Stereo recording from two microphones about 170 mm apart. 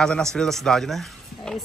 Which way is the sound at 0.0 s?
5° left (ahead or behind).